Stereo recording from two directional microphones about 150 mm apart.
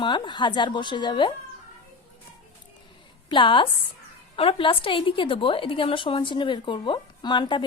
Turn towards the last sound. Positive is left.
turn(degrees=30)  # may be behind; listen again after turning